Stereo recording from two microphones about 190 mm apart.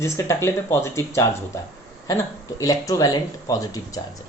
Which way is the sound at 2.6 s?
15° left (ahead or behind).